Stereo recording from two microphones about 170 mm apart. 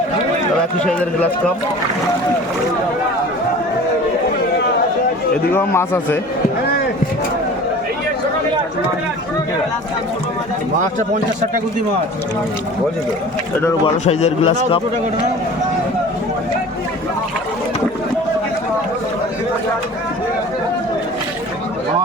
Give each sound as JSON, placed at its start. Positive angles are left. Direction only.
{"t": 0.9, "sound": "a man's voice", "side_deg": 5}
{"t": 5.5, "sound": "a man's voice", "side_deg": 10}
{"t": 14.0, "sound": "a man's voice", "side_deg": 40}